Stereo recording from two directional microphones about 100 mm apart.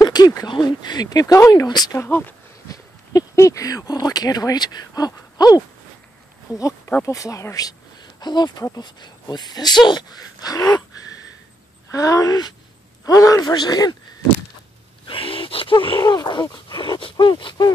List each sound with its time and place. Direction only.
0.0 s speech: 40° left (ahead or behind)
2.0 s speech: 20° left (ahead or behind)
2.7 s speech: 35° left (ahead or behind)
8.2 s speech: 45° left (ahead or behind)
11.9 s speech: 35° left (ahead or behind)
15.0 s speech: 60° left (ahead or behind)
16.0 s speech: 40° left (ahead or behind)
16.8 s speech: 55° left (ahead or behind)